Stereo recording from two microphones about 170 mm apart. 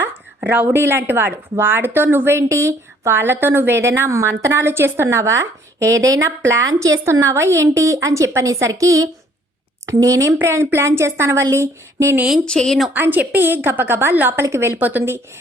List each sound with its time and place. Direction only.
0.0 s speech: 10° right (ahead or behind)
12.5 s speech: 5° left (ahead or behind)
12.9 s speech: 10° right (ahead or behind)